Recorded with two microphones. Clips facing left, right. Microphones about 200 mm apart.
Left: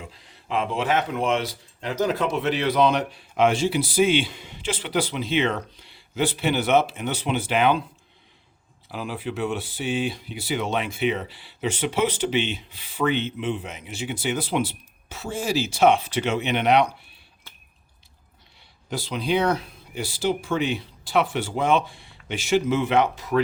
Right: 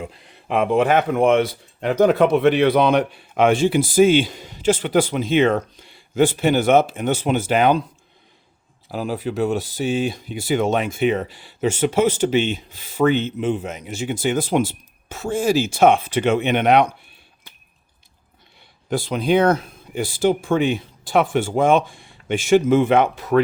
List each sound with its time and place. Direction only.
0.0 s speech: 60° right (ahead or behind); by 7.9 s 40° right (ahead or behind)
8.9 s speech: 40° right (ahead or behind)
18.9 s speech: 50° right (ahead or behind)